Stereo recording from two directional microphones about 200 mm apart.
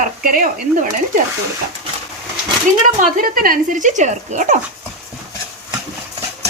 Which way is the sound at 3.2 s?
45° right (ahead or behind).